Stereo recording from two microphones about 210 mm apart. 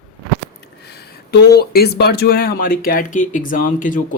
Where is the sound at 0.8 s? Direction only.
50° left (ahead or behind).